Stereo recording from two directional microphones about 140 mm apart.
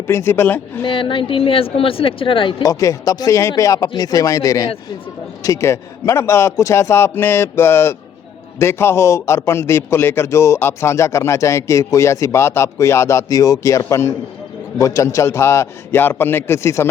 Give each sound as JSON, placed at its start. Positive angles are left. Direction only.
{"t": 0.1, "sound": "speech", "side_deg": 20}
{"t": 0.9, "sound": "speech", "side_deg": 35}
{"t": 2.6, "sound": "a man's voice", "side_deg": 25}